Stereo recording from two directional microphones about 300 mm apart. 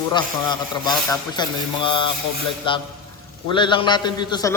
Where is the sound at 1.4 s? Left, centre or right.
Centre.